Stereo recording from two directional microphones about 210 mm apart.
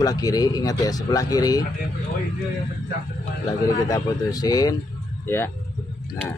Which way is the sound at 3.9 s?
15° left (ahead or behind).